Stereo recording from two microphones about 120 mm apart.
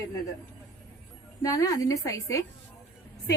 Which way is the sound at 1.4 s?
30° left (ahead or behind).